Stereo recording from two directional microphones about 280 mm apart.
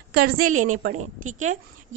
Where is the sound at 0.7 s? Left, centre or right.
Right.